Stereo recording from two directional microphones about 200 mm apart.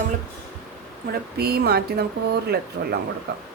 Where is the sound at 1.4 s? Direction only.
55° right (ahead or behind).